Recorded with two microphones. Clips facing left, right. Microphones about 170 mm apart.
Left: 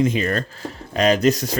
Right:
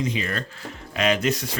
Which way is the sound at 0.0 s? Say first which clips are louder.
Left 7 dB; 45° left (ahead or behind).